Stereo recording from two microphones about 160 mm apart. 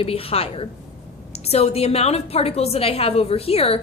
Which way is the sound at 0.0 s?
35° left (ahead or behind).